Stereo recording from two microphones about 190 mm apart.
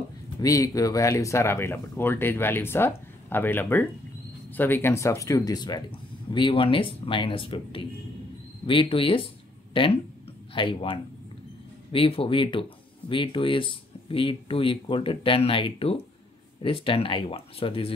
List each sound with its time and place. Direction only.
0.4 s speech: 20° left (ahead or behind)